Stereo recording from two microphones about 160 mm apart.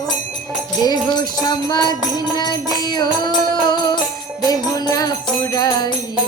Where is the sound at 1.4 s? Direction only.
25° left (ahead or behind).